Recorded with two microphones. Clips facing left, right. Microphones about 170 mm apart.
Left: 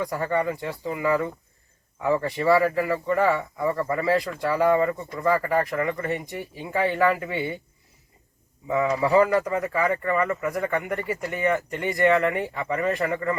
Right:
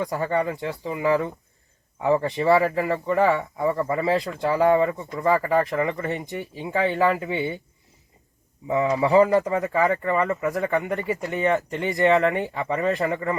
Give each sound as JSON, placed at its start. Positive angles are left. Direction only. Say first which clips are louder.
{"t": 0.0, "sound": "speech", "louder": "right 1 dB", "side_deg": -20}
{"t": 8.7, "sound": "speech", "louder": "right 2 dB", "side_deg": -25}